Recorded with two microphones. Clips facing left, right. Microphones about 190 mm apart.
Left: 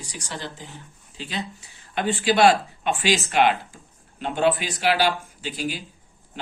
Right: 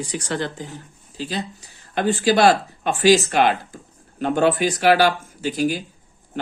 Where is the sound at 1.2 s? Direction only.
40° right (ahead or behind).